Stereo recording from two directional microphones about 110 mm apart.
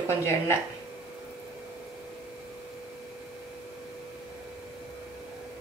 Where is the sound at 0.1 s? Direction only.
25° left (ahead or behind).